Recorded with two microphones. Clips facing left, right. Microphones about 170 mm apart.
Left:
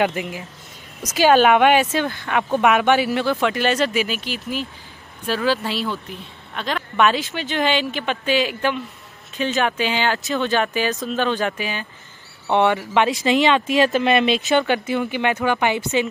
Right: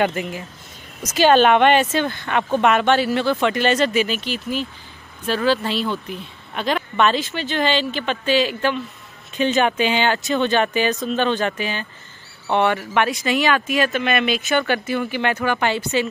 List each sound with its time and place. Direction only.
0.0 s speech: 10° left (ahead or behind)
6.5 s speech: 5° right (ahead or behind)
7.0 s speech: 10° left (ahead or behind)
9.4 s speech: centre (ahead or behind); by 16.1 s 15° left (ahead or behind)